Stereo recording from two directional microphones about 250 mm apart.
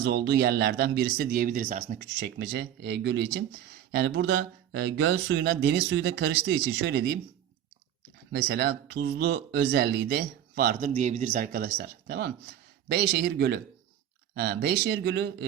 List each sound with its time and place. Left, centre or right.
0.0 s speech: right
8.3 s speech: right